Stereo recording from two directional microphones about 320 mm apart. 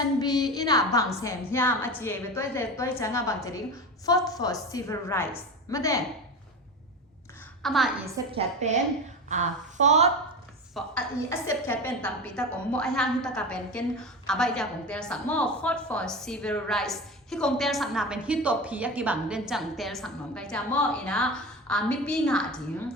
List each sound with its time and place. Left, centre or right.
0.2 s a woman's voice: centre
7.6 s a woman's voice: centre
8.3 s a woman's voice: centre
10.8 s a woman's voice: centre